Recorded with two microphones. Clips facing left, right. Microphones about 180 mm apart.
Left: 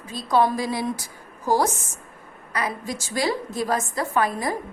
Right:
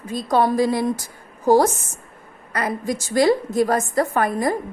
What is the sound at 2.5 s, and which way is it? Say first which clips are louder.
A woman's voice: right 4 dB; 50° right (ahead or behind).